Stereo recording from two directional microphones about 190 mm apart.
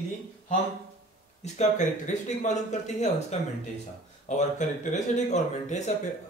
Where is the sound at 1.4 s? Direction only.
40° left (ahead or behind).